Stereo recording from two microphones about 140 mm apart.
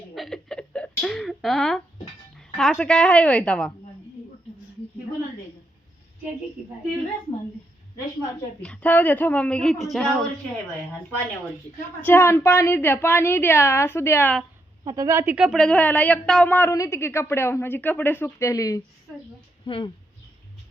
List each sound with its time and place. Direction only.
0.1 s a sound: centre (ahead or behind)
2.6 s a woman's voice: 5° left (ahead or behind)
8.6 s a woman's voice: 10° left (ahead or behind)
12.0 s a woman's voice: 15° left (ahead or behind)
14.8 s a woman's voice: 25° right (ahead or behind)
15.3 s a woman's voice: 10° right (ahead or behind)
15.5 s a woman's voice: 5° left (ahead or behind); by 18.8 s 25° left (ahead or behind)
19.6 s speech: 35° left (ahead or behind)